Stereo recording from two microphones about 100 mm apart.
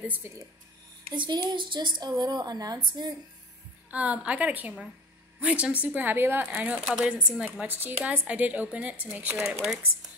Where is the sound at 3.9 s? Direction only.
15° right (ahead or behind).